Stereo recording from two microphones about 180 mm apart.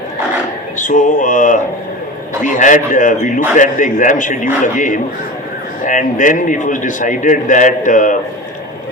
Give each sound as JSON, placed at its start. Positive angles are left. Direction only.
{"t": 0.8, "sound": "a man's voice", "side_deg": 45}